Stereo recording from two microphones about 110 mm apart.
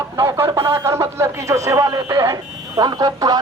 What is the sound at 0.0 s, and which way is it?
Speech, 25° right (ahead or behind).